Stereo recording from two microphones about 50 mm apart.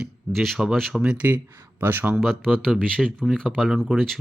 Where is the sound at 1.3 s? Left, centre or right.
Right.